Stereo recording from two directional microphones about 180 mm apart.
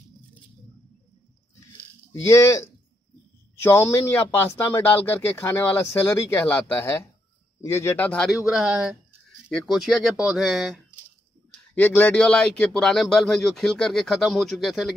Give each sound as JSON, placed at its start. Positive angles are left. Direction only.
{"t": 2.2, "sound": "speech", "side_deg": 15}
{"t": 3.6, "sound": "speech", "side_deg": 15}
{"t": 11.7, "sound": "speech", "side_deg": 10}